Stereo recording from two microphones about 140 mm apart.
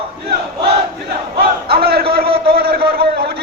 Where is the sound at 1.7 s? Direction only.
90° right.